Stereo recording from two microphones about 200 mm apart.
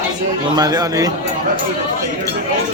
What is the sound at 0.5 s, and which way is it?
Speech, 20° right (ahead or behind).